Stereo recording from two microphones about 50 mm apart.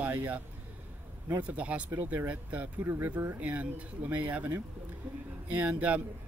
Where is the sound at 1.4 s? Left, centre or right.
Right.